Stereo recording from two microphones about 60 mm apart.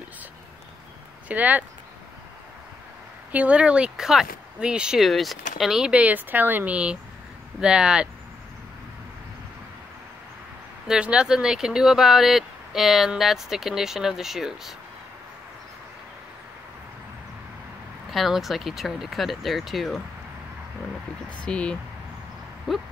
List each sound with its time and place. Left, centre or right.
1.3 s speech: right
3.3 s speech: right
3.9 s speech: centre
5.0 s speech: centre
5.9 s speech: centre
6.1 s speech: right; by 8.1 s centre
10.9 s speech: centre
18.1 s speech: centre
21.5 s speech: centre
22.7 s speech: centre